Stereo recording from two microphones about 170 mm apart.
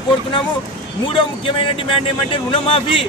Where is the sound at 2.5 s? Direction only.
30° left (ahead or behind).